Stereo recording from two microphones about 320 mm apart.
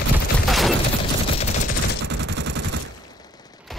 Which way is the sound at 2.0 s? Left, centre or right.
Right.